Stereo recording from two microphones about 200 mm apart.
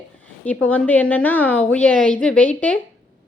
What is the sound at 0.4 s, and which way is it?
A woman's voice, 5° left (ahead or behind).